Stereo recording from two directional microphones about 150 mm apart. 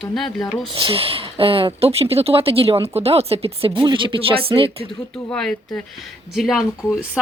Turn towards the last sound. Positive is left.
turn(degrees=-5)  # may be behind; listen again after turning